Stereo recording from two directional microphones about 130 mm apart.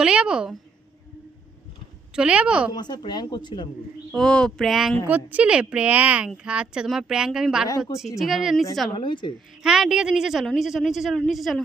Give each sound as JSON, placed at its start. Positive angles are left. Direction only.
{"t": 0.0, "sound": "a woman's voice", "side_deg": -5}
{"t": 2.1, "sound": "a woman's voice", "side_deg": -10}
{"t": 2.7, "sound": "speech", "side_deg": 35}
{"t": 4.1, "sound": "a woman's voice", "side_deg": 5}
{"t": 5.0, "sound": "a woman's voice", "side_deg": -15}
{"t": 9.0, "sound": "speech", "side_deg": 40}
{"t": 9.6, "sound": "a woman's voice", "side_deg": -5}